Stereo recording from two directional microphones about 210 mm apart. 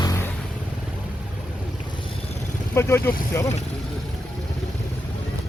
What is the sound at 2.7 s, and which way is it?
Speech, 10° left (ahead or behind).